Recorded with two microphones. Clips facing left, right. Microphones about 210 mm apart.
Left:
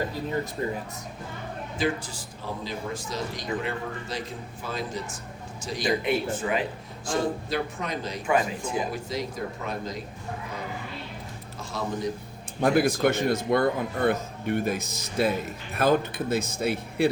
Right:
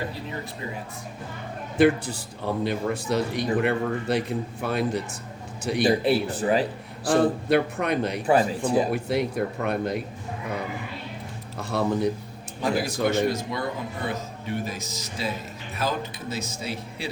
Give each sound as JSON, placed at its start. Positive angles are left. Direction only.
{"t": 0.6, "sound": "speech", "side_deg": 45}
{"t": 1.8, "sound": "speech", "side_deg": -60}
{"t": 5.8, "sound": "speech", "side_deg": -35}
{"t": 7.1, "sound": "speech", "side_deg": -60}
{"t": 8.3, "sound": "speech", "side_deg": -35}
{"t": 8.9, "sound": "speech", "side_deg": -65}
{"t": 11.7, "sound": "speech", "side_deg": -65}
{"t": 12.6, "sound": "speech", "side_deg": 55}